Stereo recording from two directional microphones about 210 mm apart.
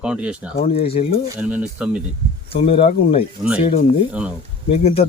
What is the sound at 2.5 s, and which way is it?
Speech, 25° left (ahead or behind).